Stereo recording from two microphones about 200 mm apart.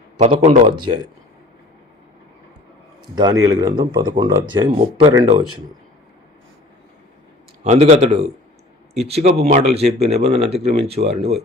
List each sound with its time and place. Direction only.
0.2 s speech: 35° right (ahead or behind)
0.8 s speech: 20° right (ahead or behind)
3.2 s speech: 20° right (ahead or behind)
7.6 s speech: 35° right (ahead or behind)